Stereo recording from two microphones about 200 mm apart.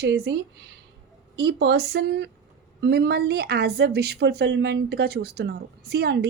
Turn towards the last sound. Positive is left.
turn(degrees=-55)  # may be behind; listen again after turning